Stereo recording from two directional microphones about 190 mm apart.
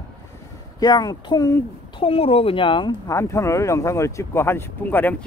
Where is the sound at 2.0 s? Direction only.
30° left (ahead or behind); by 5.2 s 10° left (ahead or behind).